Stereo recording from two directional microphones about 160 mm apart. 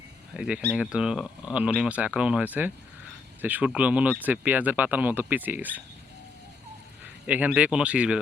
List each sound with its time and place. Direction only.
0.3 s speech: 5° right (ahead or behind)
7.0 s speech: 10° right (ahead or behind)